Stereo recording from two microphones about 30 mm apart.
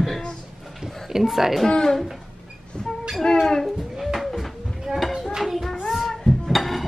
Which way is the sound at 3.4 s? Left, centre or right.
Centre.